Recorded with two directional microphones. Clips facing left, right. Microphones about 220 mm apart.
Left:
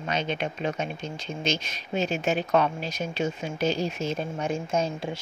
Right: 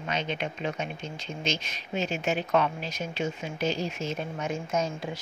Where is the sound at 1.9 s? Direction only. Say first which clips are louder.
Left 3 dB; 35° left (ahead or behind).